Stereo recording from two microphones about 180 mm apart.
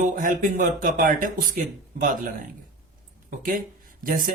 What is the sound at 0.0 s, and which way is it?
A man's voice, 50° right (ahead or behind).